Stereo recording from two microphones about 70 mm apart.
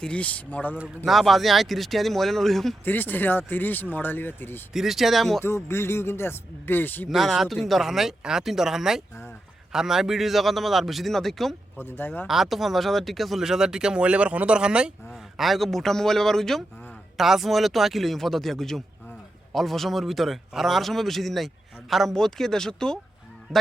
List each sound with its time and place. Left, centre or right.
0.0 s speech: centre
1.0 s speech: centre
2.8 s speech: left
4.7 s speech: centre
5.4 s speech: left
7.1 s speech: centre
11.8 s speech: left
12.3 s speech: centre
15.4 s speech: centre